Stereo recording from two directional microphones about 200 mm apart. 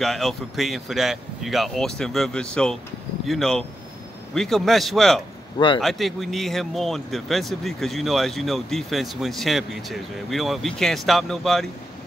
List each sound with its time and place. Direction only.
0.0 s a man's voice: centre (ahead or behind)